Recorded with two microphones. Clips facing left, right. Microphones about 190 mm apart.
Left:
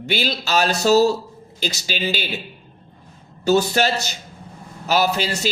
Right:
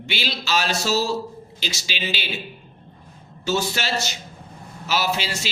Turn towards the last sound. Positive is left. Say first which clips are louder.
# left 5 dB
turn(degrees=40)  # may be behind; listen again after turning